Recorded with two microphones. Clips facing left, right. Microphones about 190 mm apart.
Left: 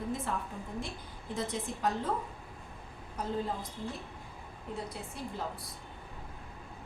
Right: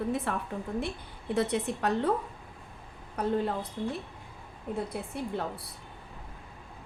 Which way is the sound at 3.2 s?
65° right (ahead or behind).